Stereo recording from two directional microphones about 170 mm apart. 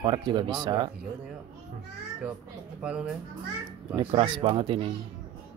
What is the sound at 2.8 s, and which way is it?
Speech, 5° right (ahead or behind).